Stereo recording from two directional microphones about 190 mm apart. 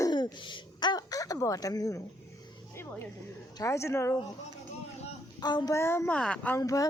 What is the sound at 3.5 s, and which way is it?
Speech, 15° left (ahead or behind).